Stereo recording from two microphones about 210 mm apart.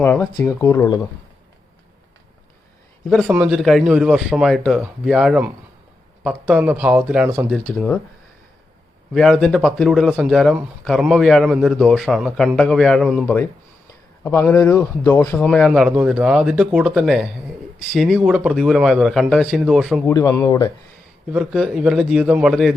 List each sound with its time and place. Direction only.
0.0 s speech: 10° left (ahead or behind)
3.0 s speech: centre (ahead or behind)
7.7 s speech: 5° left (ahead or behind)
9.1 s speech: centre (ahead or behind)
20.1 s speech: 15° left (ahead or behind)
21.3 s speech: 5° right (ahead or behind)